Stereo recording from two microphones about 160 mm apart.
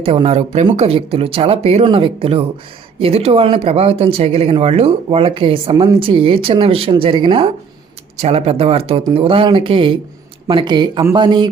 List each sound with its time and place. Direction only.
0.0 s speech: 35° right (ahead or behind)